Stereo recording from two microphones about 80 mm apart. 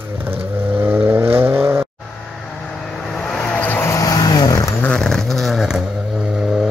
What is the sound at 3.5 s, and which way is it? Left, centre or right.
Vehicle, left.